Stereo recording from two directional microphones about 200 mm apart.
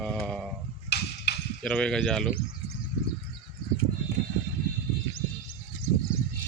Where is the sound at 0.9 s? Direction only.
55° left (ahead or behind).